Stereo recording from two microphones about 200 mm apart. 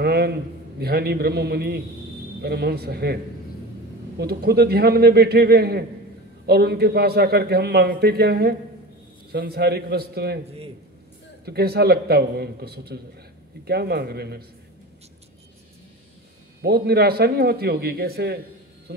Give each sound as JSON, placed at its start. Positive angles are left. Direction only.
{"t": 0.0, "sound": "a man's voice", "side_deg": -55}
{"t": 4.2, "sound": "a man's voice", "side_deg": -55}
{"t": 11.4, "sound": "a man's voice", "side_deg": -55}
{"t": 16.6, "sound": "a man's voice", "side_deg": -50}